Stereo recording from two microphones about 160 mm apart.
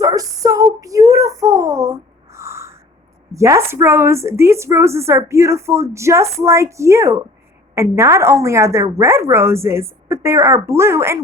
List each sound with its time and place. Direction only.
0.0 s child singing: 20° right (ahead or behind)
3.3 s a woman's voice: 20° right (ahead or behind)